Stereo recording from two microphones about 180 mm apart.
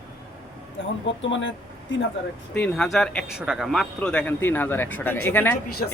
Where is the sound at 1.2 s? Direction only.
90° left.